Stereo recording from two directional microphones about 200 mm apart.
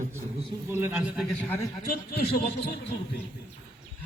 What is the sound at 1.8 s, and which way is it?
A man's voice, 45° left (ahead or behind).